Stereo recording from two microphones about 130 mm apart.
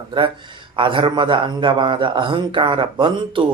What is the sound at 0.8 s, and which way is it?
A man's voice, 40° right (ahead or behind).